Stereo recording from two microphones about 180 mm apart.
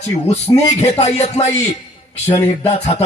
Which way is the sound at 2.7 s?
35° left (ahead or behind).